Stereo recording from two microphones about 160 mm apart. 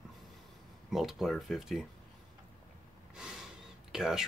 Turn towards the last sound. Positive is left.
turn(degrees=-5)  # may be behind; listen again after turning